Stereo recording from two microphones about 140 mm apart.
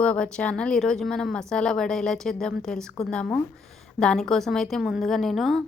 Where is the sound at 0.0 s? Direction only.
5° left (ahead or behind).